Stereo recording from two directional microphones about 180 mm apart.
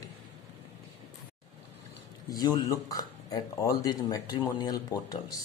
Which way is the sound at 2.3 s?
20° left (ahead or behind).